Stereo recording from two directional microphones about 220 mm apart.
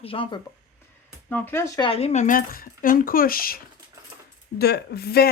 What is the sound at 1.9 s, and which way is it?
Speech, 30° left (ahead or behind).